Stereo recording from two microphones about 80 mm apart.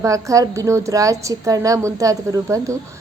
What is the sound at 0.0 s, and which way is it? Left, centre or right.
A woman's voice, right.